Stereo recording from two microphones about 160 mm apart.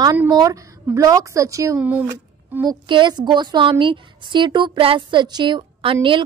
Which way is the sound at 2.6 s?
25° right (ahead or behind).